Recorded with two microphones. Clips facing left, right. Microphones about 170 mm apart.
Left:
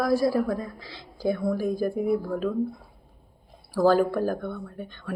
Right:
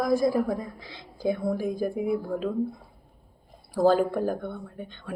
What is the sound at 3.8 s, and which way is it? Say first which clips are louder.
Speech: left 1 dB; 20° right (ahead or behind).